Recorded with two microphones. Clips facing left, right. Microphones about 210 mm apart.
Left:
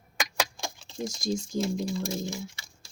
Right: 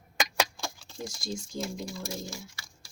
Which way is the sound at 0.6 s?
20° left (ahead or behind).